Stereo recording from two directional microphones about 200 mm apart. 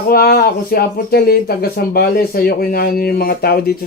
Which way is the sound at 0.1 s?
50° left (ahead or behind).